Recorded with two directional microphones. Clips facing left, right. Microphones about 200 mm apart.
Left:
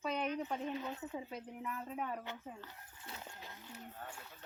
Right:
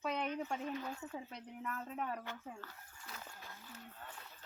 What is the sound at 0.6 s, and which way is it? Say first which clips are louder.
Speech: left 1 dB; 25° left (ahead or behind).